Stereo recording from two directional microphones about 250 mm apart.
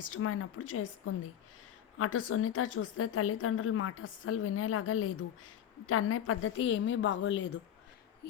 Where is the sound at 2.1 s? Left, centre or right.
Left.